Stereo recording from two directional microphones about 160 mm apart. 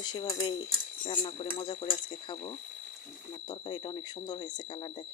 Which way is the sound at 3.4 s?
30° left (ahead or behind).